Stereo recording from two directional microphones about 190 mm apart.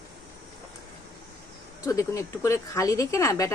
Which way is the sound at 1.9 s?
15° left (ahead or behind).